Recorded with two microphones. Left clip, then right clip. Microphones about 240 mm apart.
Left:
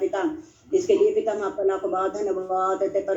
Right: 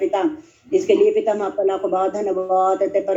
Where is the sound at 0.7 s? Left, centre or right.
Right.